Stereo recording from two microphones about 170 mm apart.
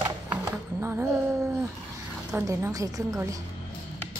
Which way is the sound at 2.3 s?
15° right (ahead or behind).